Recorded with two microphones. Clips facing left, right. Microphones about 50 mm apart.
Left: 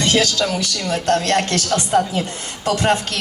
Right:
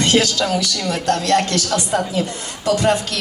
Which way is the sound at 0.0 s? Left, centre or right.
Right.